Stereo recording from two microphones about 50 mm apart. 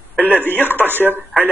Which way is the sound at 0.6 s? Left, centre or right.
Right.